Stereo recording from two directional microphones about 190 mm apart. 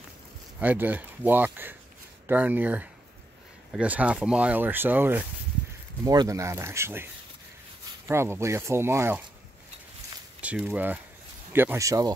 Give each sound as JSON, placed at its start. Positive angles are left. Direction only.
{"t": 0.6, "sound": "speech", "side_deg": -10}
{"t": 8.1, "sound": "speech", "side_deg": -15}
{"t": 10.4, "sound": "speech", "side_deg": -10}